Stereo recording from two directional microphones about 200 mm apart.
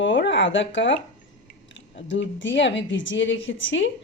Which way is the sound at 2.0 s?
65° left (ahead or behind).